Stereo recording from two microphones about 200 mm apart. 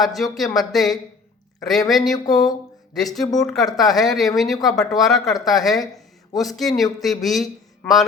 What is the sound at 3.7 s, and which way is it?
Speech, centre (ahead or behind).